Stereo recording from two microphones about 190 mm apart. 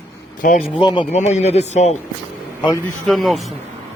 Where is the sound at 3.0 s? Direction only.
Centre (ahead or behind).